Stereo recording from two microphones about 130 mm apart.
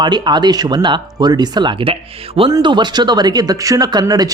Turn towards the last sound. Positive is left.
turn(degrees=-30)  # may be behind; listen again after turning